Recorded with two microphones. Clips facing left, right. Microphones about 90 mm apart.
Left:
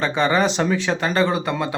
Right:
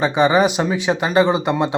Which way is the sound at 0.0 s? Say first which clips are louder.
Right 4 dB; 15° right (ahead or behind).